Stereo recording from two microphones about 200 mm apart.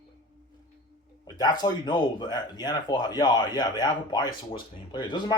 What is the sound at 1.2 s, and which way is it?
Speech, 20° left (ahead or behind).